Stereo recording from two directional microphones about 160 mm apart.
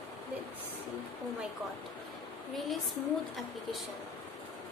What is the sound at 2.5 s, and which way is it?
Speech, centre (ahead or behind).